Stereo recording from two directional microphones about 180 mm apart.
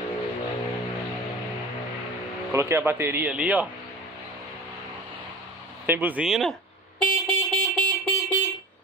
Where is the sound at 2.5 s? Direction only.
15° right (ahead or behind).